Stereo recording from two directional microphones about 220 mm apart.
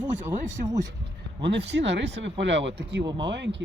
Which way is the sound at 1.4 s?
55° right (ahead or behind).